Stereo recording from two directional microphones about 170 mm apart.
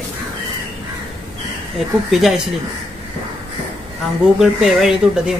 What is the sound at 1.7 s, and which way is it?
Speech, centre (ahead or behind).